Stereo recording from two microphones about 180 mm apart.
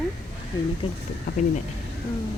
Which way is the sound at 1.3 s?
65° left (ahead or behind).